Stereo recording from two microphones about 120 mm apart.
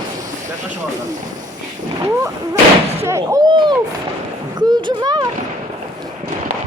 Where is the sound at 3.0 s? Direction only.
20° right (ahead or behind).